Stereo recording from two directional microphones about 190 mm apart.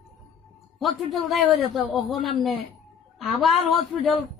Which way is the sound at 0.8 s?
Centre (ahead or behind).